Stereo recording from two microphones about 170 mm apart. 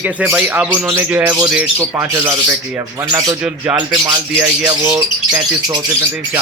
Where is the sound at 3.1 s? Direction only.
15° right (ahead or behind).